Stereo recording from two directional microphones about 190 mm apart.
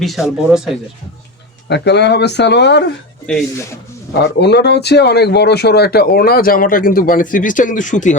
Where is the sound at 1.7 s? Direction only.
65° left (ahead or behind).